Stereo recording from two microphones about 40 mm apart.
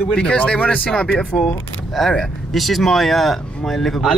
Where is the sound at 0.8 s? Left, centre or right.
Left.